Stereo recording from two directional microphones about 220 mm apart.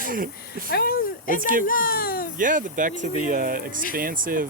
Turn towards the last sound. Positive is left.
turn(degrees=-40)  # may be behind; listen again after turning